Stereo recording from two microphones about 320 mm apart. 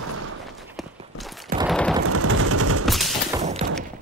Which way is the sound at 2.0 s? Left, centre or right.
Right.